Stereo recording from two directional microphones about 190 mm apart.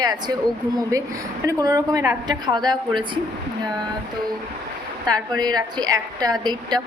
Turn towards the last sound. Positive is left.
turn(degrees=-20)  # may be behind; listen again after turning